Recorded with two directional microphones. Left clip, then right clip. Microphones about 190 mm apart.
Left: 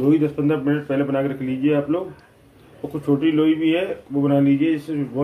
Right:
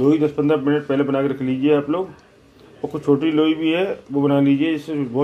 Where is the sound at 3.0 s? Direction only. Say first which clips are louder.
Right 1 dB; 25° right (ahead or behind).